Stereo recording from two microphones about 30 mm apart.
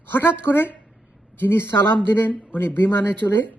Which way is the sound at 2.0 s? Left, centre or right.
Left.